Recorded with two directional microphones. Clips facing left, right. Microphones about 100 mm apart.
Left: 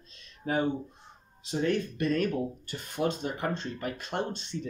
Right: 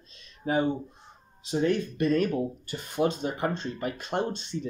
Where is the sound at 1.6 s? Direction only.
15° right (ahead or behind).